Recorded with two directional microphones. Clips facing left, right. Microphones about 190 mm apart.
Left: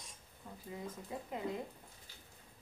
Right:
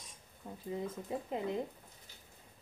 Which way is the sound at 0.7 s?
25° right (ahead or behind).